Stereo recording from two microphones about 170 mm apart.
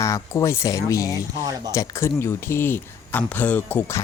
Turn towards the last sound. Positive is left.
turn(degrees=15)  # may be behind; listen again after turning